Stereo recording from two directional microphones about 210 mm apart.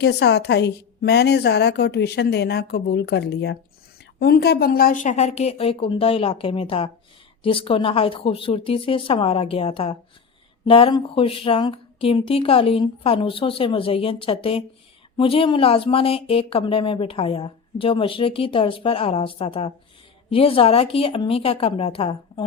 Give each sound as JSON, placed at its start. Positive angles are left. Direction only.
{"t": 0.0, "sound": "a woman's voice", "side_deg": 55}